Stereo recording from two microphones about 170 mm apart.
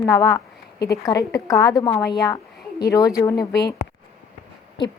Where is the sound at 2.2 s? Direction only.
20° left (ahead or behind).